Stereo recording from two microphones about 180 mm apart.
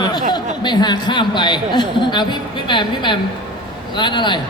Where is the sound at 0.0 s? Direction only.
25° left (ahead or behind).